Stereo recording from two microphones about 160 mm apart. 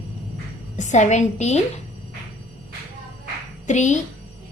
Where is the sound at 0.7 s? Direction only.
50° left (ahead or behind).